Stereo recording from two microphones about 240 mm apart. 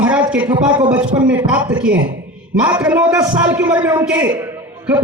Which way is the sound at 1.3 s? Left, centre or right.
Centre.